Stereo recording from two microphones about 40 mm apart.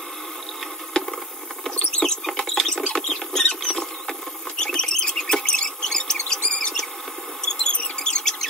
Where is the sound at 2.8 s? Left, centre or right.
Centre.